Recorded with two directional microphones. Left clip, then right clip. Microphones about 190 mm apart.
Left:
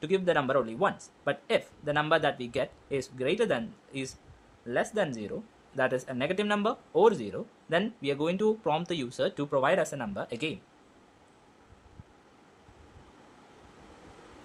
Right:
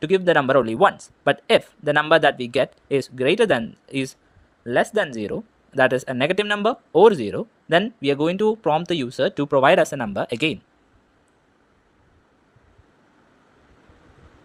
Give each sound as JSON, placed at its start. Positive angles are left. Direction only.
{"t": 0.0, "sound": "speech", "side_deg": -40}